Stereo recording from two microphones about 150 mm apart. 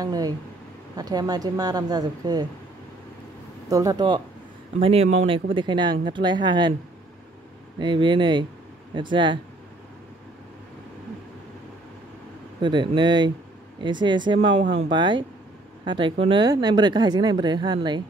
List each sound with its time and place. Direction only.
0.0 s speech: 25° right (ahead or behind)
3.6 s speech: 20° right (ahead or behind)
4.7 s speech: 40° right (ahead or behind)
7.8 s speech: 30° right (ahead or behind)
12.5 s speech: 30° right (ahead or behind)